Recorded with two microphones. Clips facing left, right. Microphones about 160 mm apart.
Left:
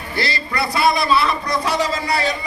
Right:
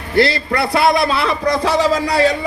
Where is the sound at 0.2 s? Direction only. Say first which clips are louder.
Right 8 dB; 75° right (ahead or behind).